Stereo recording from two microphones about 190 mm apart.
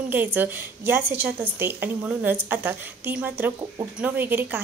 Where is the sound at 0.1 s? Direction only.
10° right (ahead or behind).